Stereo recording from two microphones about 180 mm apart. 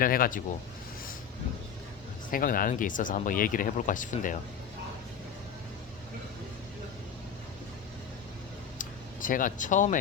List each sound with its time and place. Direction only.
0.0 s speech: 50° left (ahead or behind)
2.3 s speech: 50° left (ahead or behind)
8.8 s a sound: 50° left (ahead or behind)